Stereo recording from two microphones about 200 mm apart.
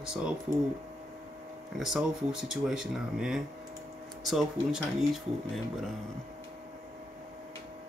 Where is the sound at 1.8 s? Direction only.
Centre (ahead or behind).